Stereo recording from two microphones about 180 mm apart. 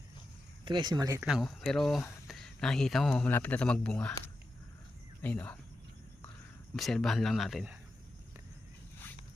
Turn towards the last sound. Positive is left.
turn(degrees=0)  # may be behind; listen again after turning